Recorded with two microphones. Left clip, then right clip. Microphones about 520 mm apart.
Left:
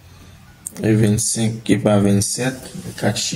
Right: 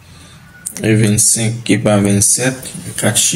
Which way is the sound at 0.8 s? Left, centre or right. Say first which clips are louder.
Right 4 dB; left.